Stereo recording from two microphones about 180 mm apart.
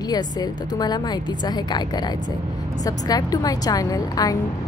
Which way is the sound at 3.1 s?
20° left (ahead or behind).